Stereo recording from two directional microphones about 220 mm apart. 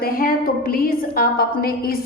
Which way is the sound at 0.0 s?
40° left (ahead or behind).